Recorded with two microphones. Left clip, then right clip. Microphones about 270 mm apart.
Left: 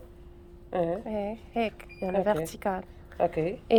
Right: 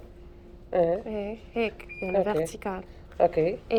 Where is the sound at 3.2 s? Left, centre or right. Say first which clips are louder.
Right 4 dB; left.